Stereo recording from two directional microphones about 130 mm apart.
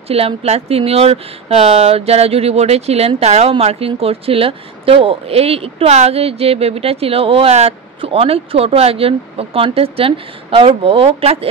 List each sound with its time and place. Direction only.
0.1 s speech: 50° right (ahead or behind)